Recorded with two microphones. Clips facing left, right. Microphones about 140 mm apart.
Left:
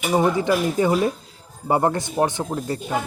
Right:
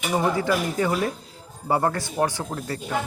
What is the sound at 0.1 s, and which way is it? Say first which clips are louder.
Speech: left 3 dB; 20° left (ahead or behind).